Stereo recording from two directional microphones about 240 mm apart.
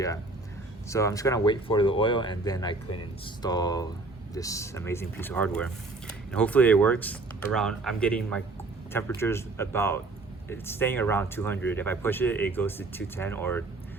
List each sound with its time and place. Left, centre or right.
0.9 s speech: centre